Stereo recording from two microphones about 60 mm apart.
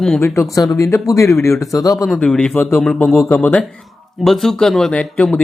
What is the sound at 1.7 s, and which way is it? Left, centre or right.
Speech, left.